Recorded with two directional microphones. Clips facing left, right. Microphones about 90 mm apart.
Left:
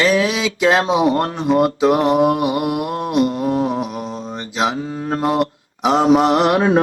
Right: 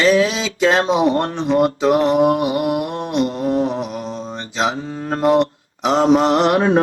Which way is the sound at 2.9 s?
45° left (ahead or behind).